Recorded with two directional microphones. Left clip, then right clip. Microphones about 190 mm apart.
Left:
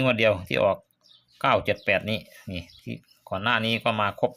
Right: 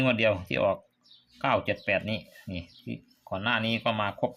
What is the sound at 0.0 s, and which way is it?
Speech, 15° left (ahead or behind).